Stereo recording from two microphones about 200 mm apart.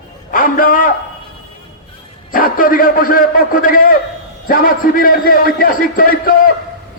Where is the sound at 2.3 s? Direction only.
45° left (ahead or behind).